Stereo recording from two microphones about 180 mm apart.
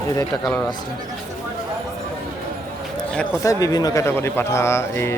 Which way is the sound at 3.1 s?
5° left (ahead or behind).